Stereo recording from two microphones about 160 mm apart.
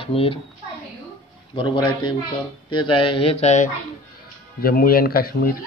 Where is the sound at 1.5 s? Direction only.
30° left (ahead or behind); by 3.7 s 45° left (ahead or behind).